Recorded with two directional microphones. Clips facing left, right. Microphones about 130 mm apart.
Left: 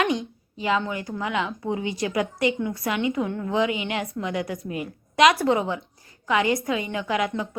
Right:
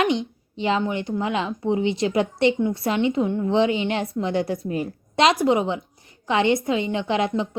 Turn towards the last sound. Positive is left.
turn(degrees=-25)  # may be behind; listen again after turning